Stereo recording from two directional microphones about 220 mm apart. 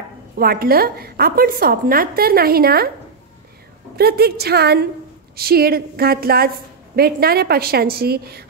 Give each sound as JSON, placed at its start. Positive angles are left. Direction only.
{"t": 0.4, "sound": "a woman's voice", "side_deg": -45}
{"t": 3.9, "sound": "a woman's voice", "side_deg": -45}